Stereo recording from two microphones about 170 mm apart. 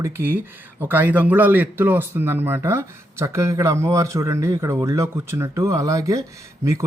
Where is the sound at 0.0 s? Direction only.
10° right (ahead or behind).